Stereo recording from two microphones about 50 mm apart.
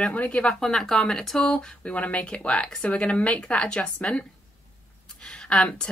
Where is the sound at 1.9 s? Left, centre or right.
Left.